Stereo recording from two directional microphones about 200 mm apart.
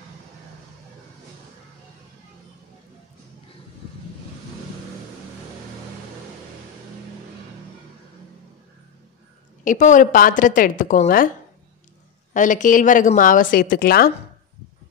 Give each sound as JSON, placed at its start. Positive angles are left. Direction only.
{"t": 9.7, "sound": "a woman's voice", "side_deg": 40}
{"t": 12.4, "sound": "a woman's voice", "side_deg": 40}